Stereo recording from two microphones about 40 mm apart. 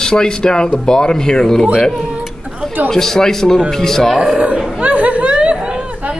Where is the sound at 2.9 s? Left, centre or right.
Centre.